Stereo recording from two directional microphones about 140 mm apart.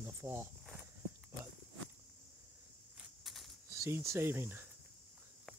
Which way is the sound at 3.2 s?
Centre (ahead or behind).